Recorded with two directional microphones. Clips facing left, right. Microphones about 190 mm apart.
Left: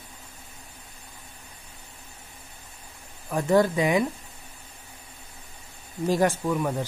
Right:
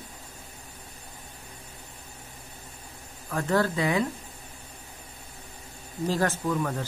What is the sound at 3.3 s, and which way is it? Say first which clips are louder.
Speech: left 4 dB; 15° left (ahead or behind).